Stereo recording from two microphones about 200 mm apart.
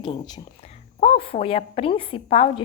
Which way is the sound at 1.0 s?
25° left (ahead or behind).